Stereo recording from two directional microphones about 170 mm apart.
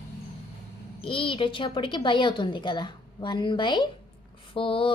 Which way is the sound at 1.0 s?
30° left (ahead or behind).